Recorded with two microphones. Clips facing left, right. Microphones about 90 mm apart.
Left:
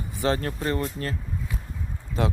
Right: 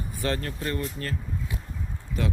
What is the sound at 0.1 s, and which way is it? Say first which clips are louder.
Speech: left 5 dB; 20° left (ahead or behind).